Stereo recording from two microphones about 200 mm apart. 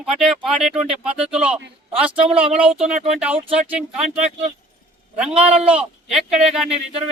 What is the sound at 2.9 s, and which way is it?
Speech, 35° right (ahead or behind).